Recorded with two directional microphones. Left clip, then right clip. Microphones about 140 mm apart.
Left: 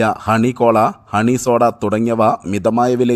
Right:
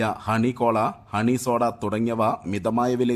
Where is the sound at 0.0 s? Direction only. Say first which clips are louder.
Left 9 dB; 45° left (ahead or behind).